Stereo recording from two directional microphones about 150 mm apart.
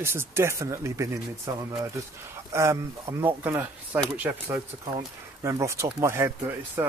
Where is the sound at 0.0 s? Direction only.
15° right (ahead or behind).